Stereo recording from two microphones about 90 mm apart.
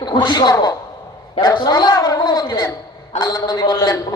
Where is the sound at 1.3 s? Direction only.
60° left (ahead or behind).